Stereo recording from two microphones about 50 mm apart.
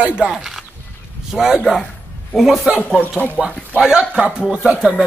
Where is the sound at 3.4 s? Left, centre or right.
Centre.